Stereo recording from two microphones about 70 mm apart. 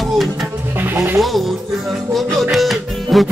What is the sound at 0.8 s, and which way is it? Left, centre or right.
Music, right.